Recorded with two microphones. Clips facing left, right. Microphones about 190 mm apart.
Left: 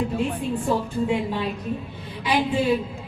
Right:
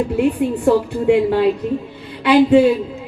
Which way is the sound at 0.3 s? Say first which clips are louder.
Right 9 dB; 65° right (ahead or behind).